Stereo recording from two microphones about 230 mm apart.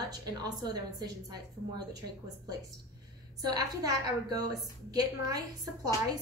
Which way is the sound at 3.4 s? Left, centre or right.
Centre.